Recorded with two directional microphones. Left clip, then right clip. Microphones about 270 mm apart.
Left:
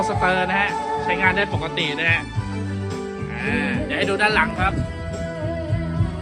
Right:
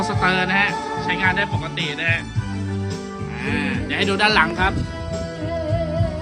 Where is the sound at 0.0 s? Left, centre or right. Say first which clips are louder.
Even; centre.